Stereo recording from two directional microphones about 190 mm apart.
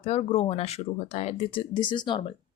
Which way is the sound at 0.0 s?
30° left (ahead or behind).